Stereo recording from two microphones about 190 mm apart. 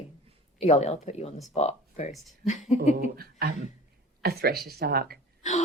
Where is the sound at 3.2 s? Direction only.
55° right (ahead or behind).